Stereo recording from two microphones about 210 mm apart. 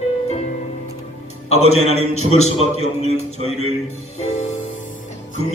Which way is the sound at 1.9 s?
30° left (ahead or behind).